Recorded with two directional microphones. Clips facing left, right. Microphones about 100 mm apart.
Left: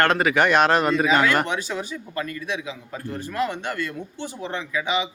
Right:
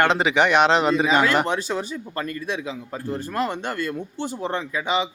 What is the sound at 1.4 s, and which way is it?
A man's voice, 35° right (ahead or behind).